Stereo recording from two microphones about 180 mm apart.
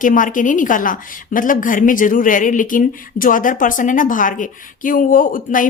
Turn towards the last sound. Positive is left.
turn(degrees=50)  # may be behind; listen again after turning